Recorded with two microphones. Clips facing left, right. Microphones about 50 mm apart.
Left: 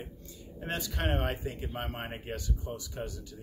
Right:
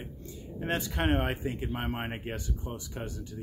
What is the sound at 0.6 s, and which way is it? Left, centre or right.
Speech, right.